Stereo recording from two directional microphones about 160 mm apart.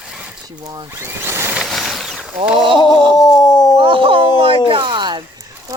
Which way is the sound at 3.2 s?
25° left (ahead or behind).